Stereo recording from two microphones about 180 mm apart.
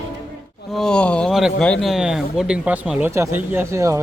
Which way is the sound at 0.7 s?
5° left (ahead or behind).